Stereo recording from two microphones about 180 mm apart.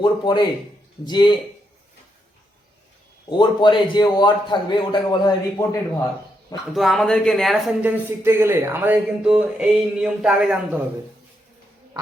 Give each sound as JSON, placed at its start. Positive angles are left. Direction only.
{"t": 0.0, "sound": "a man's voice", "side_deg": 25}
{"t": 3.2, "sound": "a man's voice", "side_deg": 25}
{"t": 6.7, "sound": "speech", "side_deg": 0}